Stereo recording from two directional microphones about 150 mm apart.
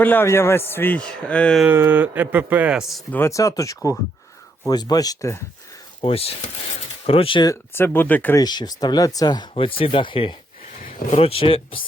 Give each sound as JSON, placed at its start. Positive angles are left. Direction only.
{"t": 0.0, "sound": "a man's voice", "side_deg": 15}
{"t": 1.6, "sound": "speech", "side_deg": -15}
{"t": 3.1, "sound": "speech", "side_deg": 15}
{"t": 6.0, "sound": "speech", "side_deg": 40}
{"t": 7.5, "sound": "a man's voice", "side_deg": 15}
{"t": 8.4, "sound": "speech", "side_deg": 25}
{"t": 10.8, "sound": "a sound", "side_deg": 65}
{"t": 11.1, "sound": "speech", "side_deg": 40}